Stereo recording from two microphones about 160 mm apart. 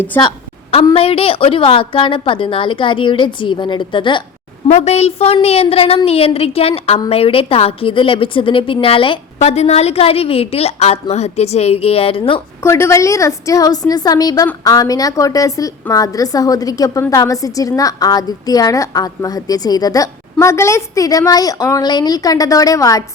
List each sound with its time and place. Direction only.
0.9 s a woman's voice: 35° left (ahead or behind)
4.7 s a woman's voice: 45° left (ahead or behind)
12.6 s a woman's voice: 20° left (ahead or behind)